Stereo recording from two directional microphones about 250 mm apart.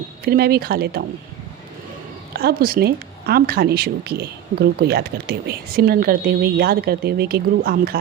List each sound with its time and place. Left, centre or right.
0.3 s speech: right
2.3 s speech: right